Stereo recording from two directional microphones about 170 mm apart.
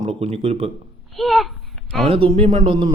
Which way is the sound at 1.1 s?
Centre (ahead or behind).